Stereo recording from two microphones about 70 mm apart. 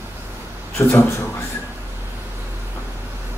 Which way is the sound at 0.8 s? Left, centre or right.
Left.